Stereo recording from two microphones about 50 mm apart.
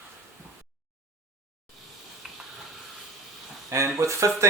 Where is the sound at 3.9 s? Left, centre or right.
Right.